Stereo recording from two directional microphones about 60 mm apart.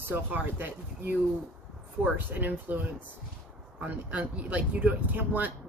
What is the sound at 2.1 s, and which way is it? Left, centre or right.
Speech, right.